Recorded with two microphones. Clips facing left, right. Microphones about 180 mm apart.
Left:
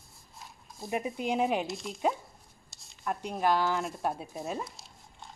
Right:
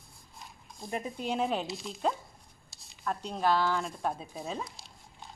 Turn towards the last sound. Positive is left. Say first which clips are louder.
# even
turn(degrees=0)  # may be behind; listen again after turning